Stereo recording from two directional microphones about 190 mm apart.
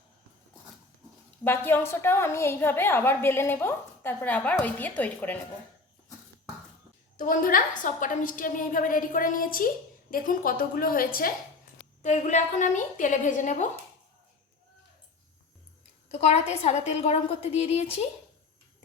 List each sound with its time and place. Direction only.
1.5 s a woman's voice: 10° left (ahead or behind)
7.2 s a woman's voice: 45° left (ahead or behind)
16.1 s a woman's voice: 35° left (ahead or behind)